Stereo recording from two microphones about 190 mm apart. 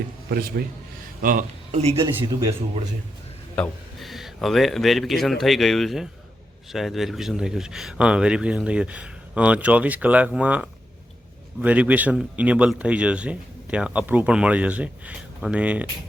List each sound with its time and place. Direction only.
0.3 s a man's voice: 50° right (ahead or behind); by 2.0 s 35° right (ahead or behind)
2.0 s speech: 15° right (ahead or behind)
3.5 s a man's voice: 5° left (ahead or behind)